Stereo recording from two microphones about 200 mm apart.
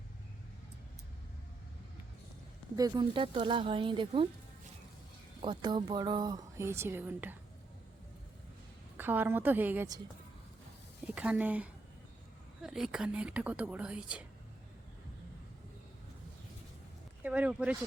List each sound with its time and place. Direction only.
2.7 s speech: 20° right (ahead or behind)
5.4 s speech: 20° right (ahead or behind)
9.0 s a woman's voice: 10° right (ahead or behind)
11.0 s a woman's voice: 5° right (ahead or behind)
17.2 s a woman's voice: 5° right (ahead or behind)